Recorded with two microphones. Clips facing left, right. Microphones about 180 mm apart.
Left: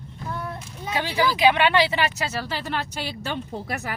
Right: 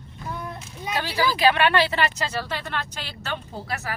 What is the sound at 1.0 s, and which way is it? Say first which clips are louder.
A woman's voice: left 2 dB; 15° left (ahead or behind).